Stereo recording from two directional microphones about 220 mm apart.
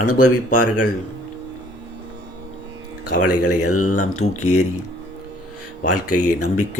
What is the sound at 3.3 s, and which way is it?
Speech, 90° left.